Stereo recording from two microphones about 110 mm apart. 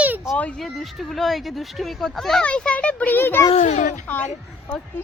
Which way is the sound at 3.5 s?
90° left.